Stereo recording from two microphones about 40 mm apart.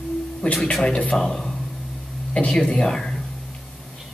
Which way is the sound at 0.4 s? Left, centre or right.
Left.